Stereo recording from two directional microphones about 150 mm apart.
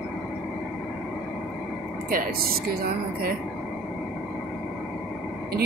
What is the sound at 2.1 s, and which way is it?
Speech, 90° right.